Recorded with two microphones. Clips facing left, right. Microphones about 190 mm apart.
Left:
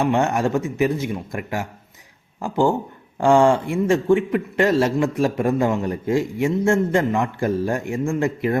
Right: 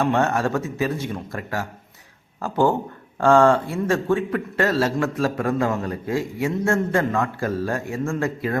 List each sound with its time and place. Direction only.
0.0 s a man's voice: 15° left (ahead or behind)